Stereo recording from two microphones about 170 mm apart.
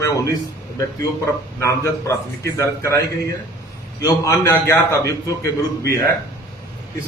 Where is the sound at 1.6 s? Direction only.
15° left (ahead or behind).